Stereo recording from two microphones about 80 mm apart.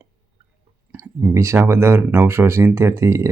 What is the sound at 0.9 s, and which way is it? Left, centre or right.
Speech, right.